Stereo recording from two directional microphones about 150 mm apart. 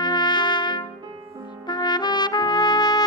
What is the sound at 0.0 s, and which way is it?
Trumpet, 30° left (ahead or behind).